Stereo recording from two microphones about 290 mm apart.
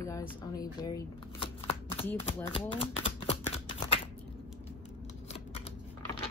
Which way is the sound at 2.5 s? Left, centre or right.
Centre.